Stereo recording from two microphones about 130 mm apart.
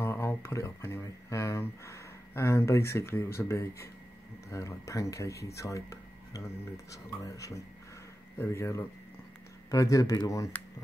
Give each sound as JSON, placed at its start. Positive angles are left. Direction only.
{"t": 0.0, "sound": "speech", "side_deg": 20}